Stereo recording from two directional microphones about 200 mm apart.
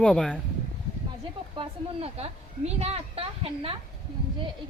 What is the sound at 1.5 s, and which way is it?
Speech, 30° right (ahead or behind).